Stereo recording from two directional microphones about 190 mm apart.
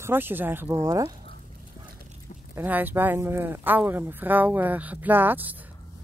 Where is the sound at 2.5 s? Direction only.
10° right (ahead or behind).